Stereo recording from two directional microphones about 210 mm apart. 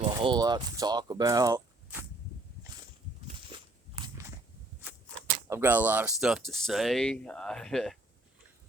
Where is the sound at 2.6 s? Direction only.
20° right (ahead or behind).